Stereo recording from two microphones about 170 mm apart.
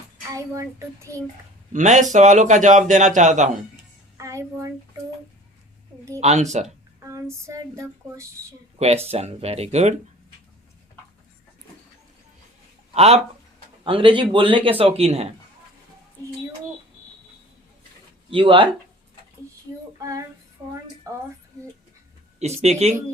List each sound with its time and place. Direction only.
1.7 s a man's voice: 45° right (ahead or behind)
4.2 s a child's voice: 20° right (ahead or behind)
6.1 s a man's voice: 40° right (ahead or behind)
7.0 s speech: 15° right (ahead or behind)
9.0 s a man's voice: 40° right (ahead or behind)
12.9 s a man's voice: 40° right (ahead or behind)
18.3 s a man's voice: 30° right (ahead or behind)
20.0 s female singing: 20° right (ahead or behind)
21.1 s a woman's voice: 20° right (ahead or behind)
22.4 s a man's voice: 40° right (ahead or behind)